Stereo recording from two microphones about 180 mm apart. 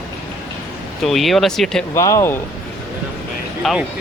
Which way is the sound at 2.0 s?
15° left (ahead or behind).